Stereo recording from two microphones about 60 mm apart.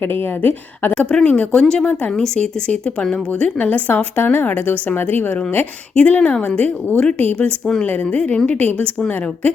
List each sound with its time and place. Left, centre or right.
0.1 s a woman's voice: left
0.9 s speech: centre
3.6 s a woman's voice: left
5.9 s a woman's voice: centre